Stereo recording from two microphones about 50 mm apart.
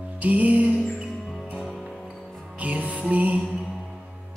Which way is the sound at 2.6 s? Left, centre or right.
Right.